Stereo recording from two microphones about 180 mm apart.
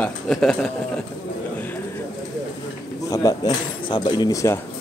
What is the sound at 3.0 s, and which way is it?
Speech, 20° left (ahead or behind).